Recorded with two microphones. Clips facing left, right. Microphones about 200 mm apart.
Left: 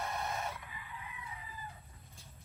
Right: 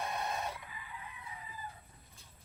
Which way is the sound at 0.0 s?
15° right (ahead or behind).